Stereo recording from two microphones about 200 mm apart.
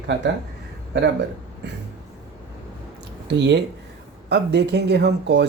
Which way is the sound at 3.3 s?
60° right (ahead or behind).